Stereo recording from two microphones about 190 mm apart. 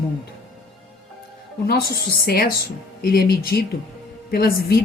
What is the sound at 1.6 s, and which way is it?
A woman's voice, 55° left (ahead or behind).